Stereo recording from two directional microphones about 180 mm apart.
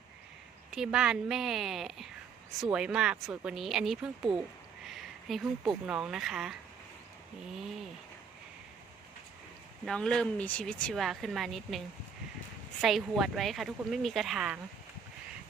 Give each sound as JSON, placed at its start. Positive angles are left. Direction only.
{"t": 0.7, "sound": "speech", "side_deg": -5}
{"t": 4.9, "sound": "a sound", "side_deg": 0}
{"t": 5.8, "sound": "speech", "side_deg": -5}
{"t": 9.8, "sound": "speech", "side_deg": 5}
{"t": 12.8, "sound": "speech", "side_deg": 0}